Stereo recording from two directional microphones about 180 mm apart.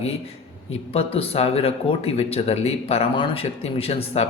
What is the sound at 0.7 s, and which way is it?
Speech, 35° left (ahead or behind).